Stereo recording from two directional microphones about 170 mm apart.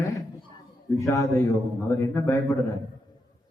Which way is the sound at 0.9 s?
15° left (ahead or behind).